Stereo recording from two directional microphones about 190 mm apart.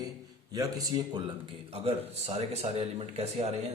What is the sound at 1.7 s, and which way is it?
Speech, 30° right (ahead or behind).